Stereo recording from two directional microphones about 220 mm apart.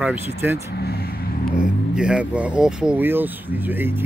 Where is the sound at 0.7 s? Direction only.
45° left (ahead or behind).